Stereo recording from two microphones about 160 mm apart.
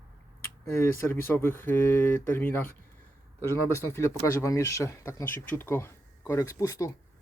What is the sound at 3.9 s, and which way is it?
Speech, 20° left (ahead or behind).